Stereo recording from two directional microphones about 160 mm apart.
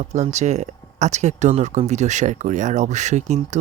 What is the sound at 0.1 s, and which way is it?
Speech, 45° right (ahead or behind).